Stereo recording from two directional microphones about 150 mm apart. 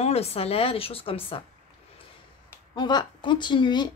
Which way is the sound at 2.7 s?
30° left (ahead or behind).